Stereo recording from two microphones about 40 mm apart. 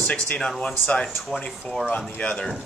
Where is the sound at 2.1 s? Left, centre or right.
Left.